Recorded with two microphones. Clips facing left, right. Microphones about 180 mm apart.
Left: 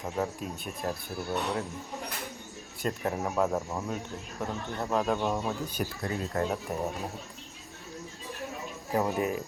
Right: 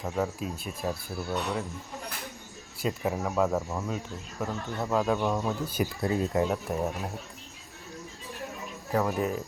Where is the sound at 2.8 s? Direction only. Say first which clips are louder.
Right 1 dB; 5° right (ahead or behind).